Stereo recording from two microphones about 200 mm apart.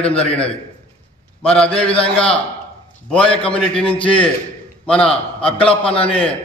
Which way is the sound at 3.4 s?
25° left (ahead or behind).